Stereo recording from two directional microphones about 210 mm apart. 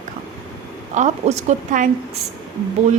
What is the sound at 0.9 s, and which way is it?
Speech, 35° right (ahead or behind).